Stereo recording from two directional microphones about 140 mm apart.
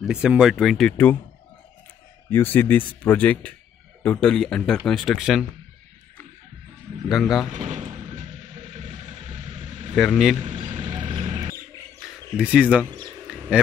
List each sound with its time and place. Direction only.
0.0 s speech: 5° right (ahead or behind)
2.3 s speech: 15° left (ahead or behind)
7.1 s speech: centre (ahead or behind)
7.5 s vehicle: 60° right (ahead or behind)
9.9 s speech: centre (ahead or behind)
10.5 s vehicle: 35° right (ahead or behind)
11.1 s music: 30° right (ahead or behind)
12.4 s speech: 10° right (ahead or behind)